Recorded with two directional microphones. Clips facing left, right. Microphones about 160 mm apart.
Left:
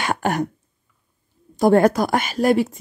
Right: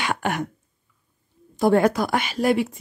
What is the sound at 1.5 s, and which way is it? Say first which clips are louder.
A woman's voice: left 3 dB; 45° left (ahead or behind).